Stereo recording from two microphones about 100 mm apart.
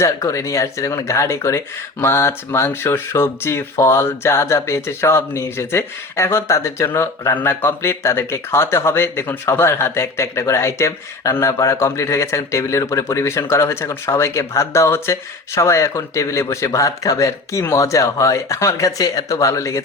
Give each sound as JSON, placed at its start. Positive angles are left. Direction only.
{"t": 0.0, "sound": "speech", "side_deg": 35}